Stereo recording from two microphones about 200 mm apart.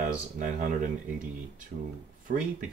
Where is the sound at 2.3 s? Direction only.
45° right (ahead or behind).